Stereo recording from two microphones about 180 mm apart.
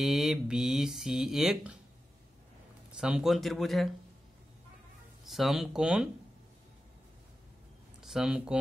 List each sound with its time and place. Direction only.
0.0 s speech: centre (ahead or behind)
2.9 s speech: 5° right (ahead or behind)
5.2 s speech: centre (ahead or behind)
8.0 s speech: 5° right (ahead or behind)